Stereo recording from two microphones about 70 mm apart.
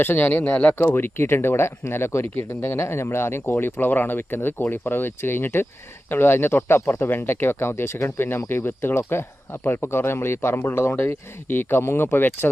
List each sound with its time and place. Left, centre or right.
0.0 s speech: left